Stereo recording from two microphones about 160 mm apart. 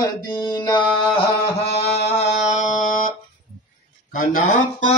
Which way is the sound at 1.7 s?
45° left (ahead or behind).